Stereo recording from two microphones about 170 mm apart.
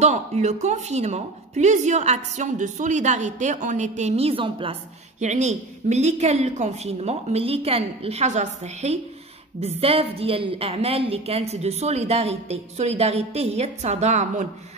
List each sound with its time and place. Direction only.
0.0 s a woman's voice: 40° right (ahead or behind)
5.2 s a woman's voice: 45° right (ahead or behind)